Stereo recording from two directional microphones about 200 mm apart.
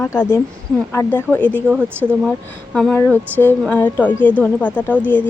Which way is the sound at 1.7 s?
10° right (ahead or behind).